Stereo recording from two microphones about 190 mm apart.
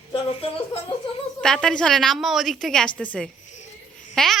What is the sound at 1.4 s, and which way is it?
A woman's voice, 5° left (ahead or behind).